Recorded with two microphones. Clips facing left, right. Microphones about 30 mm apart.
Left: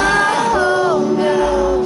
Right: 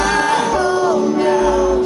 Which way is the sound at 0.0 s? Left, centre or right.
Left.